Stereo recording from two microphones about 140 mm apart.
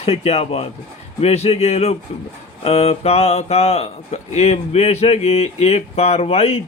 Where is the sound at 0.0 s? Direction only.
45° left (ahead or behind).